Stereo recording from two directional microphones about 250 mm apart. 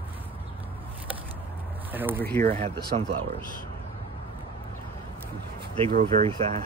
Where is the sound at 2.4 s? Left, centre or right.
Right.